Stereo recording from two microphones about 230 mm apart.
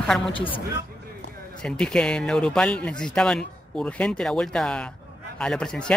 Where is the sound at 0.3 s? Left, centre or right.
Left.